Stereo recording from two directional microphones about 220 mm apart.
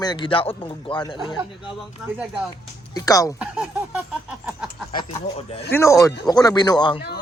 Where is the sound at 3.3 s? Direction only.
5° right (ahead or behind).